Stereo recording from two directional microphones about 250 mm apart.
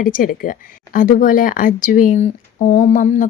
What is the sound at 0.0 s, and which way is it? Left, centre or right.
Speech, left.